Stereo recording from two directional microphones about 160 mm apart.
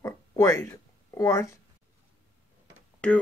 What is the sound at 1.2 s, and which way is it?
Wail, 20° left (ahead or behind).